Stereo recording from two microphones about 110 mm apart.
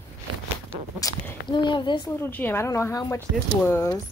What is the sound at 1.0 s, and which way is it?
Speech, 45° left (ahead or behind).